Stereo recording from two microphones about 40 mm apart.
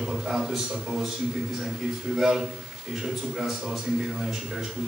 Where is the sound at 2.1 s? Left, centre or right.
Centre.